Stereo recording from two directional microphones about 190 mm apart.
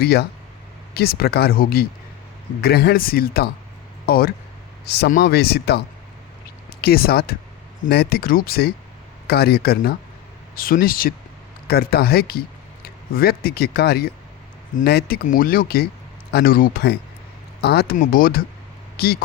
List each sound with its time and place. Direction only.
0.0 s speech: 55° left (ahead or behind)
6.8 s speech: 55° left (ahead or behind)
17.9 s speech: 45° left (ahead or behind)